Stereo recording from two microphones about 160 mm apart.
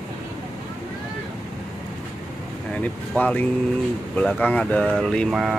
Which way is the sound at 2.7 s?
10° left (ahead or behind).